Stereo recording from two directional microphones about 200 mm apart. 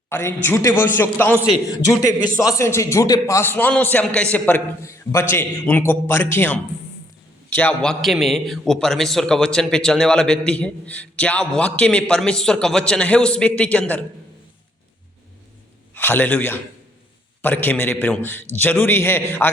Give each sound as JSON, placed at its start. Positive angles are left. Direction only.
{"t": 0.1, "sound": "a man's voice", "side_deg": 15}
{"t": 1.6, "sound": "a man's voice", "side_deg": 20}
{"t": 16.0, "sound": "a man's voice", "side_deg": 10}